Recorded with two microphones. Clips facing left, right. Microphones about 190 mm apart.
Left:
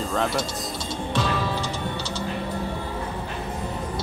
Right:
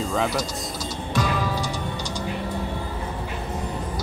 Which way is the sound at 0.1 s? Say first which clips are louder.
Even; centre (ahead or behind).